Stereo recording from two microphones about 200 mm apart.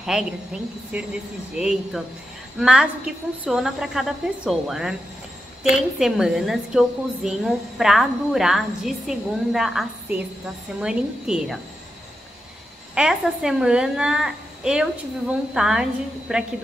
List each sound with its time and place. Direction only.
0.0 s a woman's voice: centre (ahead or behind)
12.9 s a woman's voice: 5° right (ahead or behind)